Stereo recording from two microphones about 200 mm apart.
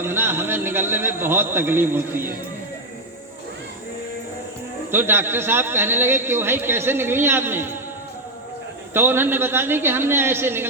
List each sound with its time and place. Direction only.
0.0 s a man's voice: 10° right (ahead or behind)
4.9 s a man's voice: 10° right (ahead or behind)
8.9 s a man's voice: 10° right (ahead or behind)